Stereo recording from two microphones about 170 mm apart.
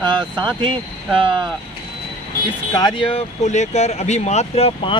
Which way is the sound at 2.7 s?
25° left (ahead or behind).